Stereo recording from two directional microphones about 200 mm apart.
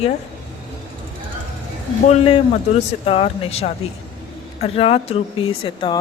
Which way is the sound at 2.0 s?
30° left (ahead or behind).